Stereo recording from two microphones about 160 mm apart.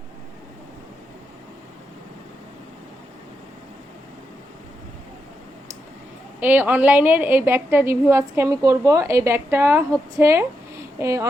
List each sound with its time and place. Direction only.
6.4 s a woman's voice: 10° right (ahead or behind)